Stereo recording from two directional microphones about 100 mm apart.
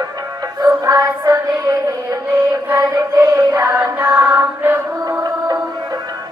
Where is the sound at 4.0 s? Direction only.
20° right (ahead or behind).